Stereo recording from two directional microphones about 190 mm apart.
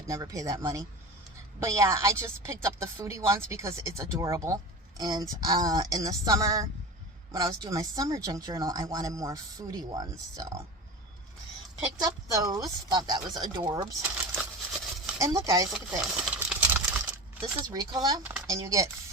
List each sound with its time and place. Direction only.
0.1 s a woman's voice: 20° right (ahead or behind)
11.9 s a woman's voice: 20° right (ahead or behind)
14.0 s a sound: 5° right (ahead or behind)
15.2 s a woman's voice: 15° right (ahead or behind)
16.2 s a sound: 5° right (ahead or behind)
17.7 s a woman's voice: 20° right (ahead or behind)